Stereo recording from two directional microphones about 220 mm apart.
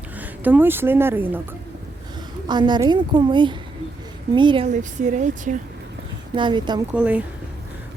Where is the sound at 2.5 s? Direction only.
20° right (ahead or behind).